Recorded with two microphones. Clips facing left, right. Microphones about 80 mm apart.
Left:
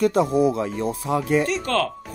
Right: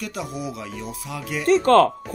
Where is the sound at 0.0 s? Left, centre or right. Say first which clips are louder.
Left 12 dB; left.